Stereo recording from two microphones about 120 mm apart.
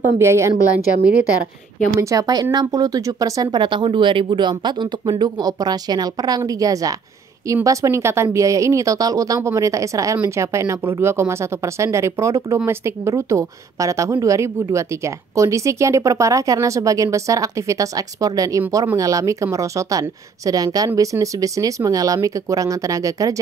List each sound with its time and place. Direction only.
0.2 s a woman's voice: 25° right (ahead or behind)
2.0 s a woman's voice: 30° right (ahead or behind)